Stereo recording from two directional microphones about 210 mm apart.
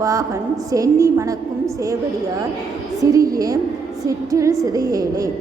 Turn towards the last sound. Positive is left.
turn(degrees=-15)  # may be behind; listen again after turning